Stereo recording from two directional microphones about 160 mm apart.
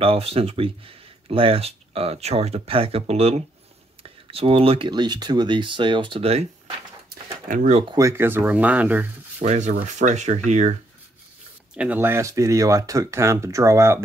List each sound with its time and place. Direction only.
0.0 s speech: 35° right (ahead or behind)
7.4 s speech: 50° right (ahead or behind)
7.9 s speech: 20° right (ahead or behind)
9.4 s speech: 50° right (ahead or behind)
11.7 s speech: 10° right (ahead or behind)